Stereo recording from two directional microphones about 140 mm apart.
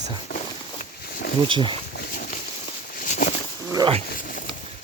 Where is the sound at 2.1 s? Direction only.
90° left.